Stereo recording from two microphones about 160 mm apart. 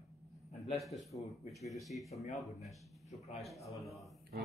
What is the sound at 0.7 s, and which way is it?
Speech, centre (ahead or behind).